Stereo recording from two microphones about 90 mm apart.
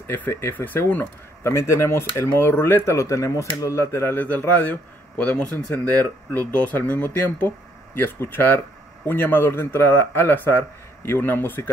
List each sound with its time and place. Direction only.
0.0 s speech: 25° left (ahead or behind)